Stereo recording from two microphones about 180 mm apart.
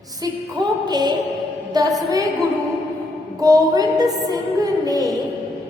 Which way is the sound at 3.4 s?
20° right (ahead or behind).